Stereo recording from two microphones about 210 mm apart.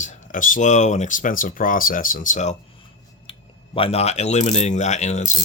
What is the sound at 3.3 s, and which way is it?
Speech, 25° left (ahead or behind).